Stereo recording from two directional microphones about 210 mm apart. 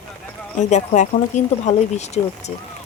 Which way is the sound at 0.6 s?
35° left (ahead or behind).